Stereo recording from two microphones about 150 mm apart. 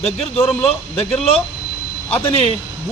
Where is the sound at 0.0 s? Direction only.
40° left (ahead or behind).